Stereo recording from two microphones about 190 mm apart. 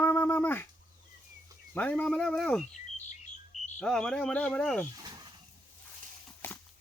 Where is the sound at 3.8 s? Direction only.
5° left (ahead or behind).